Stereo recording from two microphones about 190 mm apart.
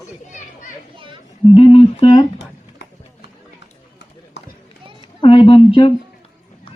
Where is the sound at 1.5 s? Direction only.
30° left (ahead or behind).